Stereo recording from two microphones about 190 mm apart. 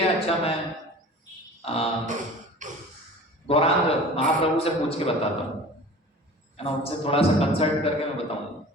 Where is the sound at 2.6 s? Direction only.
40° right (ahead or behind).